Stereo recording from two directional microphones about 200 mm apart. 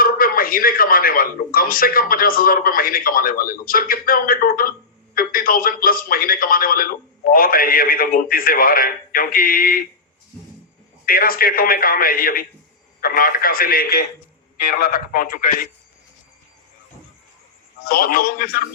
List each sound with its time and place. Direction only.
0.0 s a man's voice: 45° left (ahead or behind)
11.0 s a man's voice: 45° left (ahead or behind)
17.8 s a man's voice: 45° left (ahead or behind)